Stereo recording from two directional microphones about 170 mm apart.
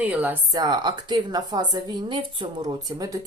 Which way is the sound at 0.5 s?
25° right (ahead or behind).